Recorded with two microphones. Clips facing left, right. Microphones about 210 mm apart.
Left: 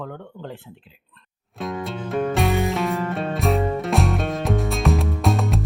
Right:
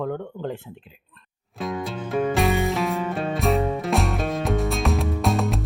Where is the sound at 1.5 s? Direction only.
Centre (ahead or behind).